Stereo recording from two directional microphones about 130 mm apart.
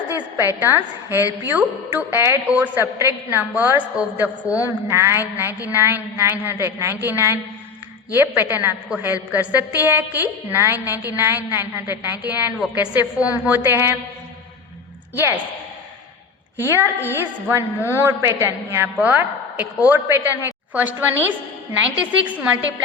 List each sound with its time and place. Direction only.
0.3 s a woman's voice: 15° right (ahead or behind)
15.1 s a woman's voice: 15° right (ahead or behind)
16.6 s a woman's voice: 20° right (ahead or behind)